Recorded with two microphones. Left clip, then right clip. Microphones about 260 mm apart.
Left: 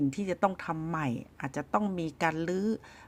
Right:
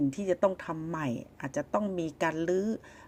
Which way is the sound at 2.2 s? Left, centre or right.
Left.